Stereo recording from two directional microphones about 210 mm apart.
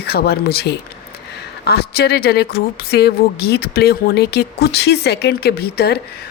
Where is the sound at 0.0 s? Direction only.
50° left (ahead or behind).